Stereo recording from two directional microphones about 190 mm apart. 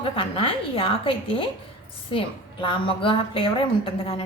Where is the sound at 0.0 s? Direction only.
30° left (ahead or behind).